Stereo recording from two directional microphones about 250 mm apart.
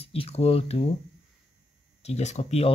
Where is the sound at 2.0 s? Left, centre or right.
Left.